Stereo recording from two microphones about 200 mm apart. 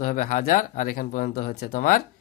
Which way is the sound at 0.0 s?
40° left (ahead or behind).